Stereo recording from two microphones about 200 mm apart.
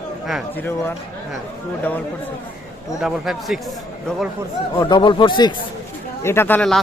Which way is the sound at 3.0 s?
Centre (ahead or behind).